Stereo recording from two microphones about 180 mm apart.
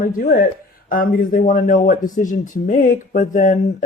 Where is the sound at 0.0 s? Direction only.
50° left (ahead or behind).